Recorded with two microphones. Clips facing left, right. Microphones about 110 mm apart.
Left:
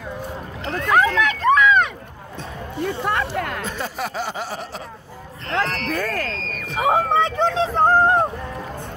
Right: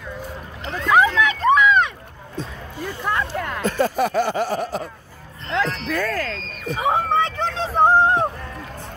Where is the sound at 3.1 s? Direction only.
65° left (ahead or behind).